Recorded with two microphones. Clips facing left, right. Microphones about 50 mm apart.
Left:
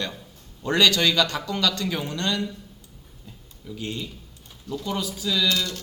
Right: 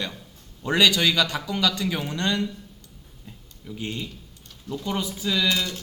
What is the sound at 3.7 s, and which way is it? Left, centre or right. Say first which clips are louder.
Speech: even; right.